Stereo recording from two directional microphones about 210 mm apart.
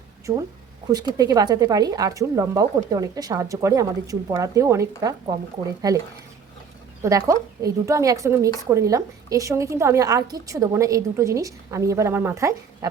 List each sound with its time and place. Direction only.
0.3 s a woman's voice: 20° right (ahead or behind)
7.0 s a woman's voice: 15° right (ahead or behind)